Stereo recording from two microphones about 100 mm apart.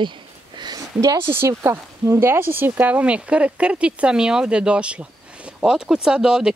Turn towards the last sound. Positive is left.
turn(degrees=-5)  # may be behind; listen again after turning